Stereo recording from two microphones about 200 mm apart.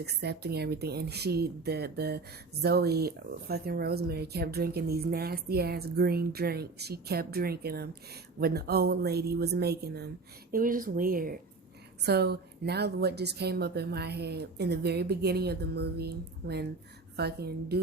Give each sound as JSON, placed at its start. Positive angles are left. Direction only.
{"t": 0.0, "sound": "a woman's voice", "side_deg": -55}